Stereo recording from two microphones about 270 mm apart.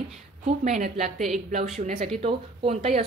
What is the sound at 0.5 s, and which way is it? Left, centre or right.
Speech, right.